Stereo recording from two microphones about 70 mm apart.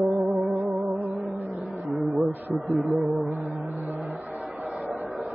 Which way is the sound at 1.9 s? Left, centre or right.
Centre.